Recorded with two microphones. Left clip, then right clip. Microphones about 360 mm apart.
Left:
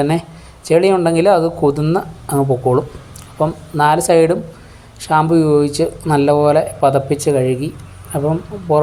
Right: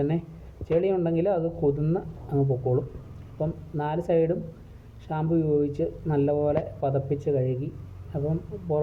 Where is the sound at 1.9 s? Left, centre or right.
Right.